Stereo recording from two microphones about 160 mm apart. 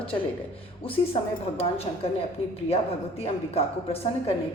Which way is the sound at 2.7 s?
40° left (ahead or behind).